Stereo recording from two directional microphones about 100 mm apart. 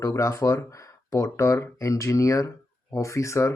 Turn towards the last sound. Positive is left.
turn(degrees=30)  # may be behind; listen again after turning